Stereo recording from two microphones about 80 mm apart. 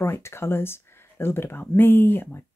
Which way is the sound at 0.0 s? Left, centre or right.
Left.